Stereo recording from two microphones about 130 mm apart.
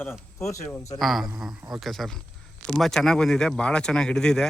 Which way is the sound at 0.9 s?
Centre (ahead or behind).